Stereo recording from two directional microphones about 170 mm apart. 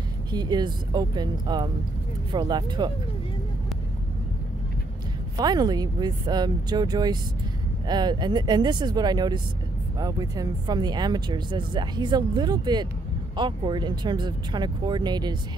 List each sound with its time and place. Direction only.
0.3 s speech: 25° right (ahead or behind)
5.4 s speech: 25° right (ahead or behind)